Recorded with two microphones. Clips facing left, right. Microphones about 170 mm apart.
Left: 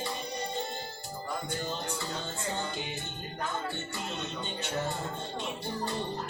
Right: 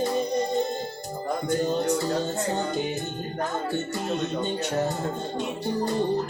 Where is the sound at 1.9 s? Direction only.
40° right (ahead or behind).